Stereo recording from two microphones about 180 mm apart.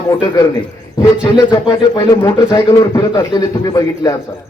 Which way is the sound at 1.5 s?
20° left (ahead or behind).